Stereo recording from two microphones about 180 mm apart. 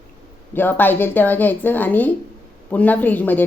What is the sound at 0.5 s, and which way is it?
A woman's voice, 10° left (ahead or behind).